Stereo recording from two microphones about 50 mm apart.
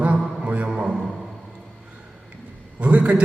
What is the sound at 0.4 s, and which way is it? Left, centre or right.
Music, right.